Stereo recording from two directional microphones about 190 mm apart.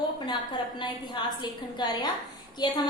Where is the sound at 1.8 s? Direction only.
20° left (ahead or behind).